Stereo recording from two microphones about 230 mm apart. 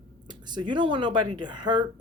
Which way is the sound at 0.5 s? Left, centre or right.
Centre.